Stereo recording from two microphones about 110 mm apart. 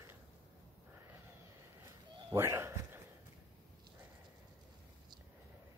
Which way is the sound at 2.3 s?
25° right (ahead or behind).